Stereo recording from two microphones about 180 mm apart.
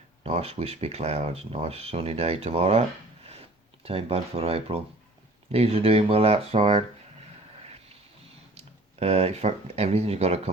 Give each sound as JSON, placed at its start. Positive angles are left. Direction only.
{"t": 0.2, "sound": "speech", "side_deg": -35}
{"t": 3.8, "sound": "speech", "side_deg": -35}
{"t": 8.5, "sound": "speech", "side_deg": -35}